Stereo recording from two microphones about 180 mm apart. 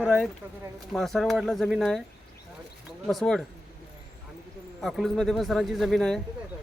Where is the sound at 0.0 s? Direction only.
Centre (ahead or behind).